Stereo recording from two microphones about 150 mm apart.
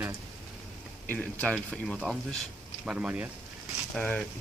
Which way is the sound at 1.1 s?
10° left (ahead or behind).